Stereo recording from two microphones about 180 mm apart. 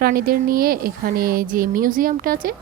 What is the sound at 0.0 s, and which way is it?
Speech, 55° right (ahead or behind).